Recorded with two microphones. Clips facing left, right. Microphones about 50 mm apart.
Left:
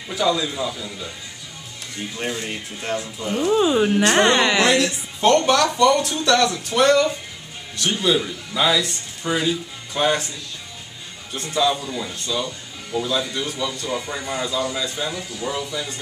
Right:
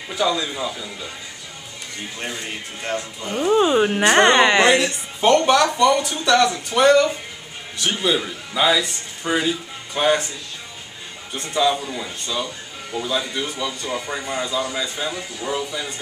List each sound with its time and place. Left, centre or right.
0.1 s speech: centre
2.1 s speech: centre
4.8 s speech: centre
11.5 s speech: centre